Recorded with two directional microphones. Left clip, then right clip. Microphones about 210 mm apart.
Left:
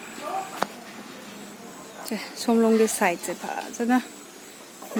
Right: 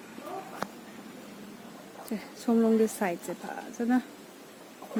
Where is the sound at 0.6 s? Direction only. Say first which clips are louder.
Left 8 dB; 15° right (ahead or behind).